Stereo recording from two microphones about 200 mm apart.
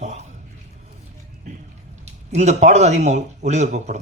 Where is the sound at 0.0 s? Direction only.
35° right (ahead or behind).